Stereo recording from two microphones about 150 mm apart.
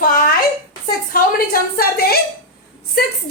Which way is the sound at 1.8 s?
90° left.